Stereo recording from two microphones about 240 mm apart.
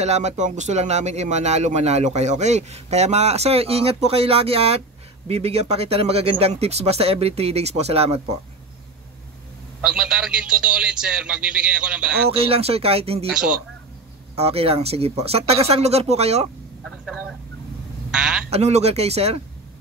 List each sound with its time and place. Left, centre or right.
0.0 s speech: right
9.8 s a man's voice: centre
12.3 s speech: right
14.3 s speech: right
16.8 s a man's voice: centre
18.5 s speech: right